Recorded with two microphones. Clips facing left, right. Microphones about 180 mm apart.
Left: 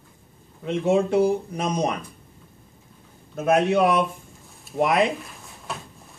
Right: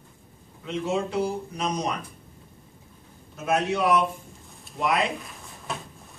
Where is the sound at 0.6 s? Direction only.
55° left (ahead or behind).